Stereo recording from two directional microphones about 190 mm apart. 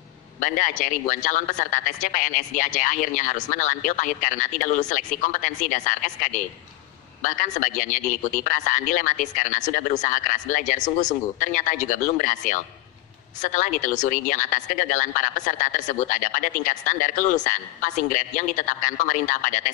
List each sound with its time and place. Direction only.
0.4 s a man's voice: 40° left (ahead or behind)